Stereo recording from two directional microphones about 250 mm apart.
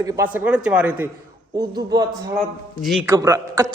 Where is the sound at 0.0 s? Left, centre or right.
Centre.